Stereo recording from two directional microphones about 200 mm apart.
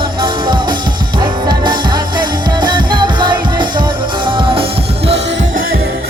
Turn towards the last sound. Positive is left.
turn(degrees=-50)  # may be behind; listen again after turning